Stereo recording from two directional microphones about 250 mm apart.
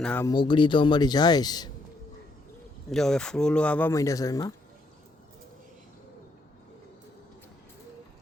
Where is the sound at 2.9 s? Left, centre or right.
Centre.